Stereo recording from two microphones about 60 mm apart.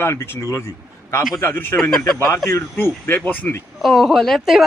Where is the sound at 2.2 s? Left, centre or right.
Left.